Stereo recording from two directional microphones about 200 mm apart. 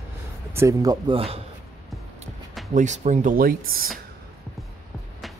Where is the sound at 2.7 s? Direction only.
35° right (ahead or behind).